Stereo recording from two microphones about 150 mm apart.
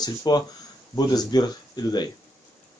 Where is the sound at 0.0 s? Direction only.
25° left (ahead or behind).